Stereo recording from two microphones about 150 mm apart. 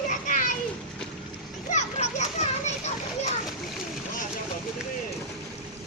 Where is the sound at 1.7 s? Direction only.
50° left (ahead or behind).